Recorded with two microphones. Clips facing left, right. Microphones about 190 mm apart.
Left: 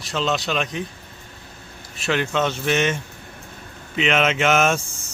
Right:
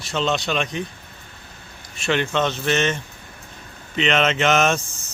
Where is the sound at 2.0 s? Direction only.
Centre (ahead or behind).